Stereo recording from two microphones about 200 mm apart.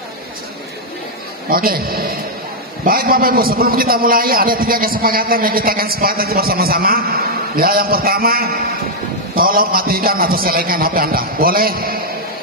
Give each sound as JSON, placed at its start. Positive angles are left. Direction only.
{"t": 1.5, "sound": "a man's voice", "side_deg": -45}